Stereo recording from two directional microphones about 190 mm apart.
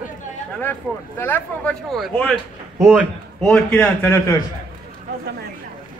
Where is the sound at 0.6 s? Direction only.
10° left (ahead or behind).